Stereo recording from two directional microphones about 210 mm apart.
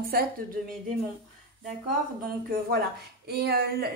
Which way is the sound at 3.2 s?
50° right (ahead or behind).